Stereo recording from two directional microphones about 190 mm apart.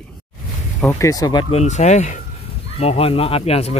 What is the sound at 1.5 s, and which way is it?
Speech, 35° left (ahead or behind).